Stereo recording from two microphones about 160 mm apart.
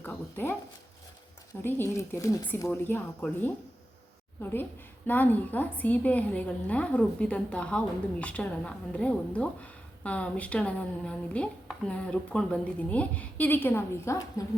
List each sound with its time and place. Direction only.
0.0 s a sound: 10° left (ahead or behind)
1.6 s a woman's voice: 15° left (ahead or behind)
5.0 s a woman's voice: 10° left (ahead or behind)